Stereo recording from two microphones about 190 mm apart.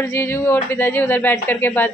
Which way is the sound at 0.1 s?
15° left (ahead or behind).